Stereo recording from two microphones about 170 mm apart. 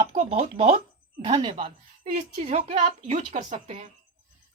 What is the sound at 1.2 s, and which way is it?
A woman's voice, 25° right (ahead or behind).